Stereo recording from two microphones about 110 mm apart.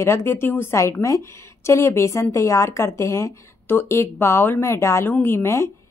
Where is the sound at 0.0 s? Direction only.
25° left (ahead or behind).